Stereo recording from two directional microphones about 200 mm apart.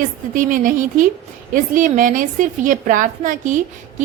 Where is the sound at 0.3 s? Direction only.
40° right (ahead or behind).